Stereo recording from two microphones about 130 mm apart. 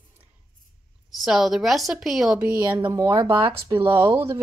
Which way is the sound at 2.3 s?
15° right (ahead or behind).